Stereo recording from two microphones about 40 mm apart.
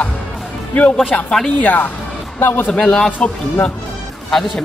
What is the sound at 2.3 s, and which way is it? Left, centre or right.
Speech, left.